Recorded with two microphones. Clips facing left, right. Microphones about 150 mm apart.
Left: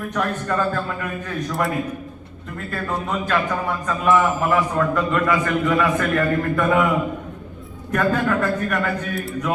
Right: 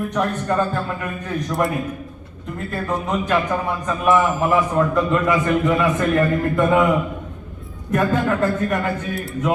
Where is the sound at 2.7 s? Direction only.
20° right (ahead or behind).